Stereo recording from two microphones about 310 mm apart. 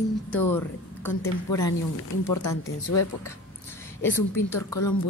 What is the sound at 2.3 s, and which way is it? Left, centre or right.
Speech, left.